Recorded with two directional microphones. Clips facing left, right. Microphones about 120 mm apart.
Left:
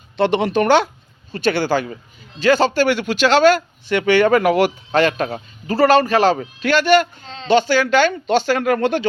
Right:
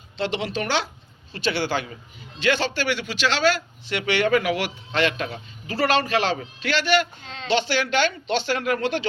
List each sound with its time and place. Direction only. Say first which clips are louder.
0.2 s a man's voice: left 10 dB; 55° left (ahead or behind)